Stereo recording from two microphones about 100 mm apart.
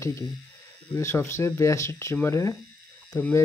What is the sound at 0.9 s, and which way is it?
Speech, 30° left (ahead or behind).